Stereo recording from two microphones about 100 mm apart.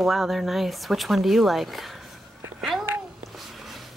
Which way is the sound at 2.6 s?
5° right (ahead or behind).